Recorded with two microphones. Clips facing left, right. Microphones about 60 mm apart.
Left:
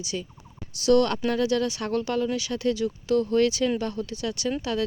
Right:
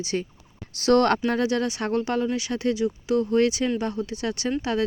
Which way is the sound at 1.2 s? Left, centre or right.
Right.